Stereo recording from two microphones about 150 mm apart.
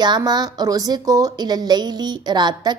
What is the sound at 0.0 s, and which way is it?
Speech, 30° right (ahead or behind).